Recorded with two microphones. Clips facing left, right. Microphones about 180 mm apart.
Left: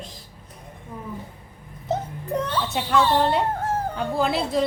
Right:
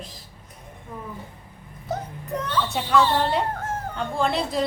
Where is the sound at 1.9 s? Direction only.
20° left (ahead or behind).